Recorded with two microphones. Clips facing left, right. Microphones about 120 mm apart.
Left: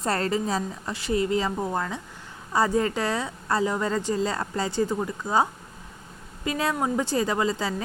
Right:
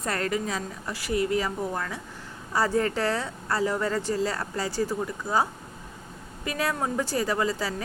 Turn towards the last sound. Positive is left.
turn(degrees=20)  # may be behind; listen again after turning